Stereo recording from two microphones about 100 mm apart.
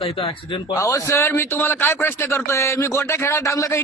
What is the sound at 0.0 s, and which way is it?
Speech, 70° left (ahead or behind).